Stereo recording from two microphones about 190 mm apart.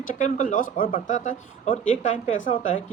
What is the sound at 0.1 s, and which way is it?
Speech, 45° left (ahead or behind).